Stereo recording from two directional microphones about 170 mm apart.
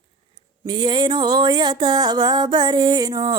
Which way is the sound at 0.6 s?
25° right (ahead or behind).